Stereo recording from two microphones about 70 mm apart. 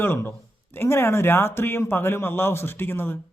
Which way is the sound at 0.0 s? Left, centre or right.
Left.